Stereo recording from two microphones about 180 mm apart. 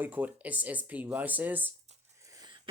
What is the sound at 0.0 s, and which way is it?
Speech, 10° right (ahead or behind).